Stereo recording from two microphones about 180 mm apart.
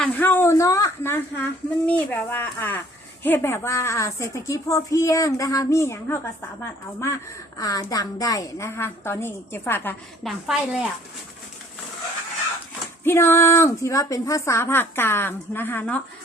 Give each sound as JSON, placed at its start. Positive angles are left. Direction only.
{"t": 0.0, "sound": "a woman's voice", "side_deg": 10}
{"t": 10.2, "sound": "a woman's voice", "side_deg": 0}
{"t": 13.1, "sound": "a woman's voice", "side_deg": 15}